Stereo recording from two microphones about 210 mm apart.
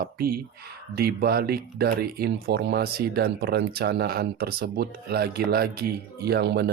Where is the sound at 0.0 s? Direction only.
45° right (ahead or behind).